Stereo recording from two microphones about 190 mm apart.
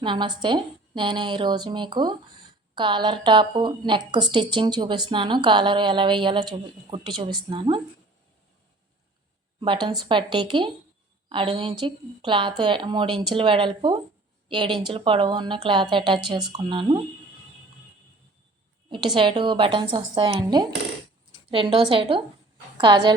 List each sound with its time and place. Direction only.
0.0 s a woman's voice: 25° right (ahead or behind)
9.6 s a woman's voice: 25° right (ahead or behind)
18.9 s a woman's voice: 25° right (ahead or behind)